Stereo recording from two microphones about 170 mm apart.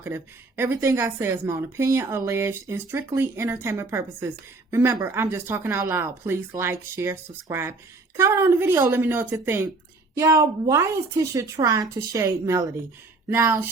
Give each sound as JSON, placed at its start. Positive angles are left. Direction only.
{"t": 0.0, "sound": "a woman's voice", "side_deg": -15}